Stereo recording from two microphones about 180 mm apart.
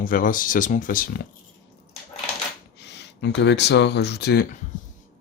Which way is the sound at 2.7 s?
70° left (ahead or behind).